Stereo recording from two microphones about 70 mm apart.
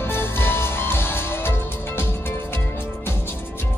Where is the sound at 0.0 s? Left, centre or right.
Left.